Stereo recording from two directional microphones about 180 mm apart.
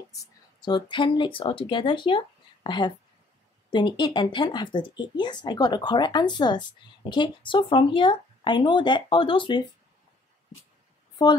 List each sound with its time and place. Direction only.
0.1 s speech: 20° left (ahead or behind)